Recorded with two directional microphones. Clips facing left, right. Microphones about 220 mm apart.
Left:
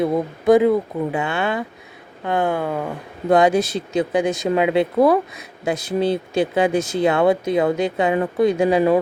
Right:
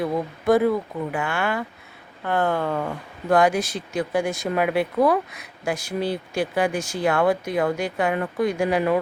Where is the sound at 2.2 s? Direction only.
15° left (ahead or behind).